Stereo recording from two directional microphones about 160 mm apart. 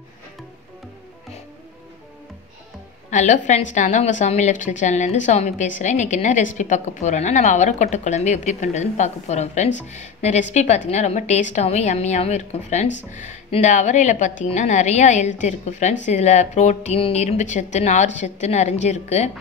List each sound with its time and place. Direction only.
3.1 s a woman's voice: 50° left (ahead or behind)